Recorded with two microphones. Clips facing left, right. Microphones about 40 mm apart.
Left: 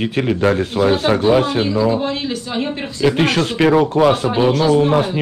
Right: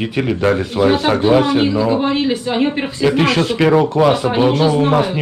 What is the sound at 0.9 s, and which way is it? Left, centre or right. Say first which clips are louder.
Speech: right 1 dB; right.